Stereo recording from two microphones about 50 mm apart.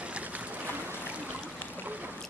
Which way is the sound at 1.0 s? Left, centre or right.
Right.